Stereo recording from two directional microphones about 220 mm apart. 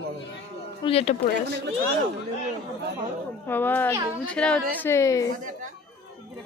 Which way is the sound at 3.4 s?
10° left (ahead or behind).